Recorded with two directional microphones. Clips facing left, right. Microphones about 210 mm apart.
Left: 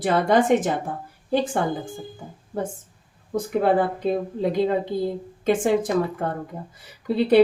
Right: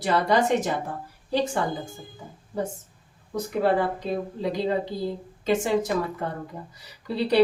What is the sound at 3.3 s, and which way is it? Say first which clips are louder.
Speech: left 3 dB; 55° left (ahead or behind).